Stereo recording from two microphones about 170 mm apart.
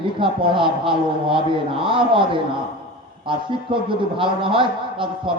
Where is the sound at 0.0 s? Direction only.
30° right (ahead or behind).